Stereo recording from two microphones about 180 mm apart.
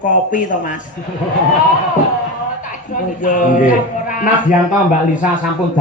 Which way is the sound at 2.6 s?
45° left (ahead or behind).